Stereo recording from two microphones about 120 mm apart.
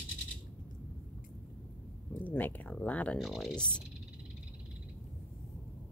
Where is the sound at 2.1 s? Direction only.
15° left (ahead or behind).